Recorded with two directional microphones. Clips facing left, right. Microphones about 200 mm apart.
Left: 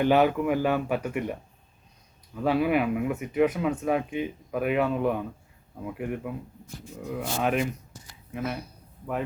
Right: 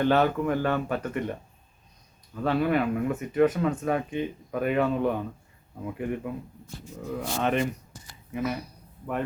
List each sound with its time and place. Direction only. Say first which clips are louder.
0.0 s speech: left 1 dB; 10° left (ahead or behind)
8.4 s speech: right 2 dB; 30° left (ahead or behind)